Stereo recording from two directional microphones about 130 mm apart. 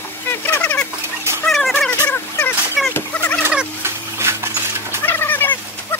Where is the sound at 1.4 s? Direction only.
5° left (ahead or behind).